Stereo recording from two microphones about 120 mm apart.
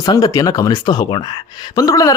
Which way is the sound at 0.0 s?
35° left (ahead or behind).